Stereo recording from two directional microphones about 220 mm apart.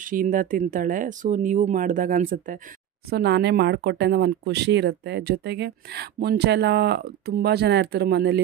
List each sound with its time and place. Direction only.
0.0 s speech: 40° right (ahead or behind)